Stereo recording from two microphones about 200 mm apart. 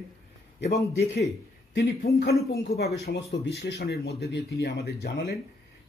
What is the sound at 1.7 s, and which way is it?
A man's voice, 50° left (ahead or behind).